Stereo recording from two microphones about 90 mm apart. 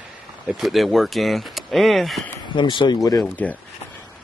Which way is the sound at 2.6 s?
60° left (ahead or behind).